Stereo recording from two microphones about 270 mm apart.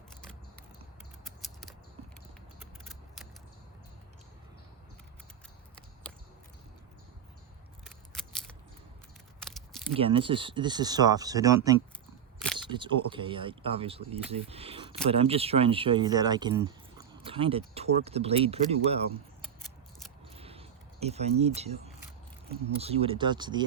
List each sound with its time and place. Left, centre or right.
9.9 s speech: centre
20.3 s a sound: right
22.4 s speech: right